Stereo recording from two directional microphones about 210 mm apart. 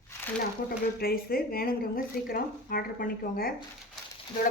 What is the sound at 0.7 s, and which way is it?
A woman's voice, 45° left (ahead or behind).